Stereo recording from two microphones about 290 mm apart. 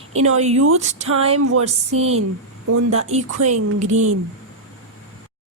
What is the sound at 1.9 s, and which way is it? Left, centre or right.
Speech, right.